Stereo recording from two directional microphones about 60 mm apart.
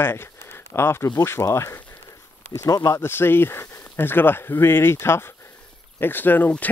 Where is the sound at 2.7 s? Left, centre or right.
Left.